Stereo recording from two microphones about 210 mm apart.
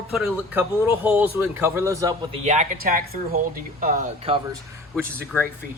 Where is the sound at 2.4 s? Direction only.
35° right (ahead or behind).